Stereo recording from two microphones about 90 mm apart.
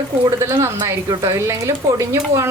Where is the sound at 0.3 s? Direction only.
30° right (ahead or behind).